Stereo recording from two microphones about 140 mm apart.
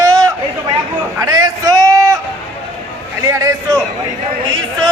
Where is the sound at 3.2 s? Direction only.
20° right (ahead or behind).